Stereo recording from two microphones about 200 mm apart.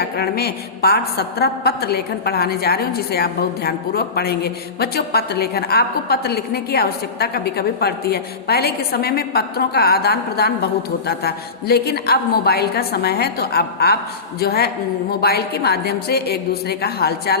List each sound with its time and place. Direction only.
0.0 s a woman's voice: 50° left (ahead or behind)